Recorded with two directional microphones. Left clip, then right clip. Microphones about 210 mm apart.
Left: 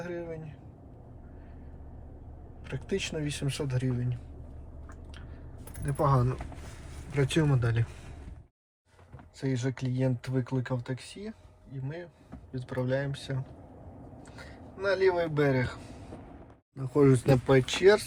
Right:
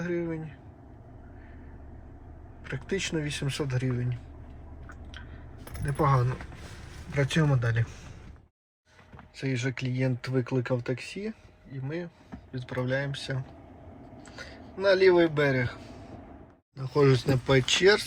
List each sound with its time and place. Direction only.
0.0 s speech: 5° right (ahead or behind)
2.6 s speech: 5° right (ahead or behind)
5.8 s speech: centre (ahead or behind)
9.6 s speech: 5° right (ahead or behind)
10.3 s speech: 20° right (ahead or behind)
11.8 s speech: 5° right (ahead or behind)
14.8 s speech: 5° right (ahead or behind)
16.7 s speech: 10° left (ahead or behind)
17.4 s speech: 5° right (ahead or behind)